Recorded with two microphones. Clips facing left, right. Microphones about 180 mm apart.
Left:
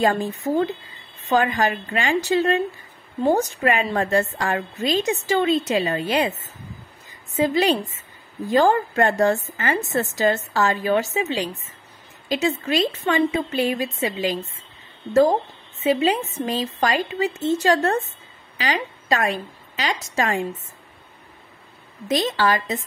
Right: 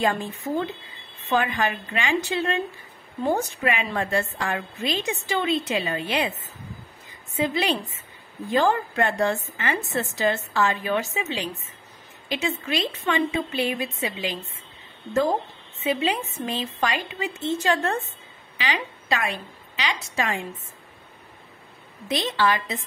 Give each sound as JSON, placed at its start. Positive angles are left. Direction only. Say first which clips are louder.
{"t": 0.0, "sound": "a woman's voice", "louder": "left 4 dB", "side_deg": 40}
{"t": 7.3, "sound": "a woman's voice", "louder": "left 5 dB", "side_deg": 40}
{"t": 15.8, "sound": "a woman's voice", "louder": "left 5 dB", "side_deg": 40}
{"t": 22.0, "sound": "a woman's voice", "louder": "left 3 dB", "side_deg": 40}